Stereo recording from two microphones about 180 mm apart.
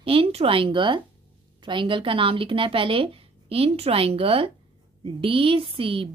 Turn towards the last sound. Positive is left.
turn(degrees=-30)  # may be behind; listen again after turning